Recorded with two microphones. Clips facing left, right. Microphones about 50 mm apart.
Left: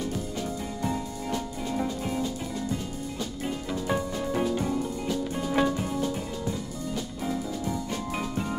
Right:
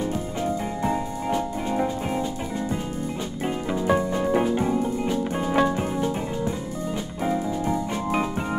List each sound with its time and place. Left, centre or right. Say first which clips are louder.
0.0 s music: right 5 dB; right
3.4 s music: right 7 dB; right